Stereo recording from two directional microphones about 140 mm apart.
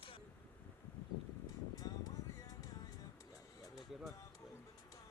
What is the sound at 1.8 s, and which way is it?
Music, 25° left (ahead or behind).